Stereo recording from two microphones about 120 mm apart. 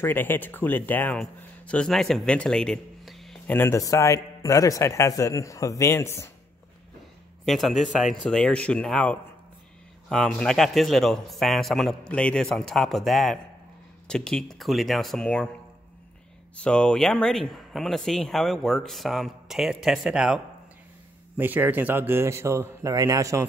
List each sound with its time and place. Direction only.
0.0 s a man's voice: 15° left (ahead or behind)
3.4 s speech: 20° left (ahead or behind)
7.4 s speech: centre (ahead or behind)
16.5 s a man's voice: 10° left (ahead or behind); by 23.4 s 25° right (ahead or behind)